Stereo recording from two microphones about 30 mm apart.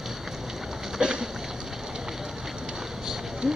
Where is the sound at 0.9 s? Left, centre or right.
Right.